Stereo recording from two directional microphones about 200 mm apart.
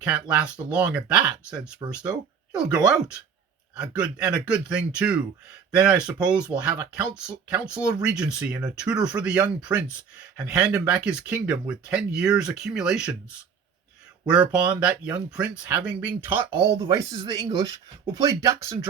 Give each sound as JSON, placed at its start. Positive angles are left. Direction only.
{"t": 0.0, "sound": "speech", "side_deg": -5}
{"t": 14.3, "sound": "speech", "side_deg": -5}